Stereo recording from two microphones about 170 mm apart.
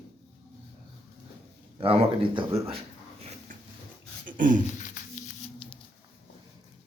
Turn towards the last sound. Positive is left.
turn(degrees=30)  # may be behind; listen again after turning